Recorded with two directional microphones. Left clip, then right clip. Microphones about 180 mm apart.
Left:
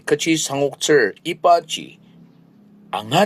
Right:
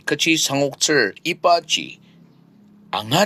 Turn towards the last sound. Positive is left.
turn(degrees=-35)  # may be behind; listen again after turning